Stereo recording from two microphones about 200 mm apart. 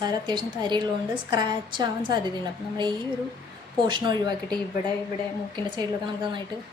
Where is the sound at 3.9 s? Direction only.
20° right (ahead or behind).